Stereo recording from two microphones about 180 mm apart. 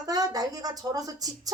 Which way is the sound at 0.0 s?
20° right (ahead or behind).